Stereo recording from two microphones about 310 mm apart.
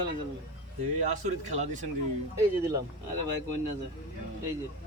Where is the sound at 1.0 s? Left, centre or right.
Right.